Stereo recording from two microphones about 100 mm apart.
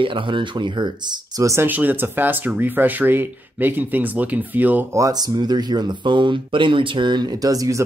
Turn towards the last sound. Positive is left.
turn(degrees=-35)  # may be behind; listen again after turning